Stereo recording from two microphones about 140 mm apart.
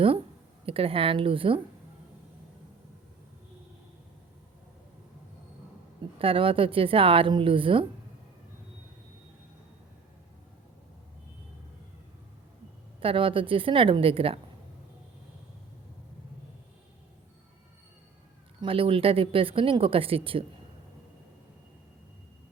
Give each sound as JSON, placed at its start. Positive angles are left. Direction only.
{"t": 0.6, "sound": "speech", "side_deg": -40}
{"t": 6.1, "sound": "speech", "side_deg": -40}
{"t": 13.0, "sound": "speech", "side_deg": -40}
{"t": 18.6, "sound": "speech", "side_deg": -40}